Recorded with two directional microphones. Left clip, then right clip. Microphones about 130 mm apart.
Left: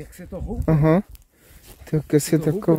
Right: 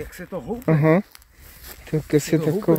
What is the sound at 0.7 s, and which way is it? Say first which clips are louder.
Speech: right 1 dB; 30° left (ahead or behind).